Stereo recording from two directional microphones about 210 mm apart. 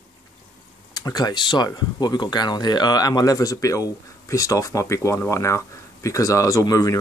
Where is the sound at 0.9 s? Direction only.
20° left (ahead or behind).